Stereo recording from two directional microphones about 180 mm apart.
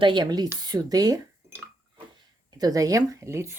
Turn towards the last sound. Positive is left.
turn(degrees=-15)  # may be behind; listen again after turning